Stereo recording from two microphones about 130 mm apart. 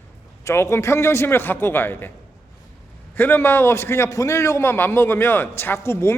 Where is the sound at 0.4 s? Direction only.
20° left (ahead or behind).